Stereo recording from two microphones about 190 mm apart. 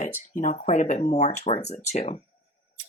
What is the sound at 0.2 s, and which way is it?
Speech, 40° left (ahead or behind).